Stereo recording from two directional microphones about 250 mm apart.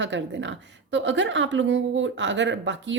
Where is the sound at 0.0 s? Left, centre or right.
Right.